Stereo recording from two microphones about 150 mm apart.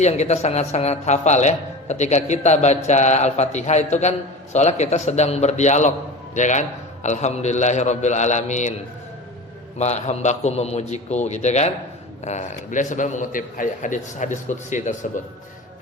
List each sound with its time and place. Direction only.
0.0 s speech: 50° left (ahead or behind)
9.7 s a man's voice: 50° left (ahead or behind)